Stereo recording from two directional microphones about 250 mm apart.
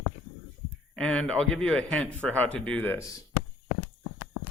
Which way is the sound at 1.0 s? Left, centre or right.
Centre.